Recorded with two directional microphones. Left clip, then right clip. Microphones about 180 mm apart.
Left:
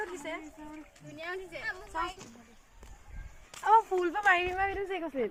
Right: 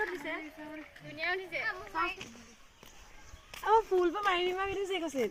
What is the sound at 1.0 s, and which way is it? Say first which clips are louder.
Speech: right 5 dB; 75° left (ahead or behind).